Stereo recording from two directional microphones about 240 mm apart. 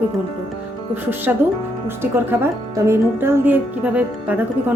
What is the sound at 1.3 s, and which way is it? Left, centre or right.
Speech, centre.